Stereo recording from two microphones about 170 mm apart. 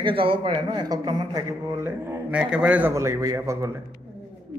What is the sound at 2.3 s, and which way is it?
A man's voice, 5° right (ahead or behind).